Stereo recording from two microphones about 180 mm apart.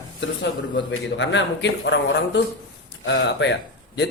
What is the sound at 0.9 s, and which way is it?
A man's voice, 90° left.